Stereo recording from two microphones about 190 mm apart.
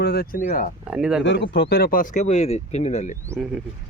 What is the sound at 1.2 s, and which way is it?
Speech, 70° left (ahead or behind).